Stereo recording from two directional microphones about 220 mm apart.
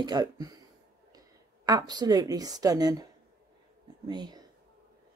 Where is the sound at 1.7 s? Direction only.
15° right (ahead or behind).